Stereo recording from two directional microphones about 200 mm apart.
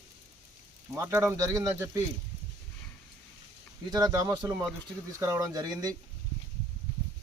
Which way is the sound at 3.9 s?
20° right (ahead or behind).